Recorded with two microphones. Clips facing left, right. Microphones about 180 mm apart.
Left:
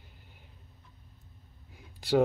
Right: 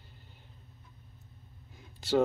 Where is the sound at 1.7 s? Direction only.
15° left (ahead or behind).